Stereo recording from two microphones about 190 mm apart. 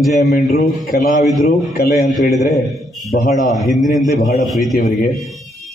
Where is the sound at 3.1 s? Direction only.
55° left (ahead or behind).